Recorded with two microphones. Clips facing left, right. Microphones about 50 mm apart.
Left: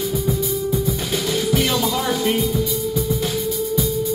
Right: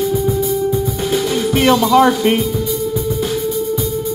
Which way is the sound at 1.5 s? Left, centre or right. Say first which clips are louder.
Right 12 dB; right.